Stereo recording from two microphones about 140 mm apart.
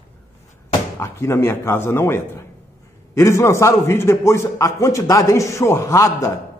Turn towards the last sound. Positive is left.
turn(degrees=20)  # may be behind; listen again after turning